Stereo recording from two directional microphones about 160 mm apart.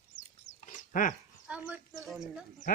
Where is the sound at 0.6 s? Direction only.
55° left (ahead or behind).